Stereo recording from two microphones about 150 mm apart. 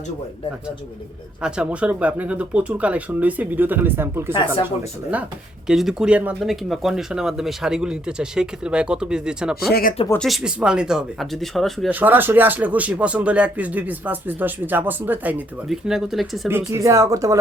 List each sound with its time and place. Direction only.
1.4 s speech: 5° right (ahead or behind)
4.3 s speech: 30° left (ahead or behind)
5.6 s speech: 5° right (ahead or behind)
11.9 s speech: 10° right (ahead or behind)
16.5 s speech: 15° right (ahead or behind)